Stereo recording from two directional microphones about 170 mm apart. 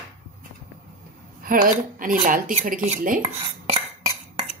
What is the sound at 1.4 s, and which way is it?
Speech, 55° right (ahead or behind).